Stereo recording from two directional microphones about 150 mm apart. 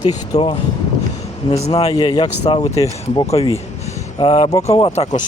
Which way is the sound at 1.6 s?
45° left (ahead or behind).